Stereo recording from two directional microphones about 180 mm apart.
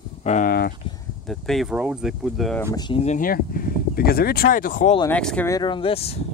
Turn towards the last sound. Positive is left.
turn(degrees=35)  # may be behind; listen again after turning